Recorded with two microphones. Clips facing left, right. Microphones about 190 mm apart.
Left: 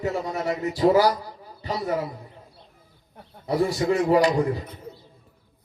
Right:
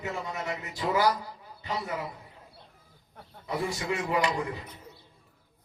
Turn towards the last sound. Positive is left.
turn(degrees=35)  # may be behind; listen again after turning